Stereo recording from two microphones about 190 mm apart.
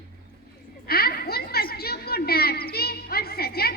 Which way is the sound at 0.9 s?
55° left (ahead or behind).